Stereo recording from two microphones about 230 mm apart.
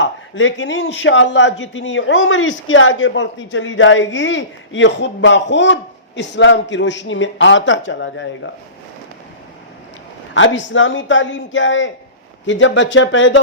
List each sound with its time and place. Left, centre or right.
0.0 s speech: left
10.3 s speech: left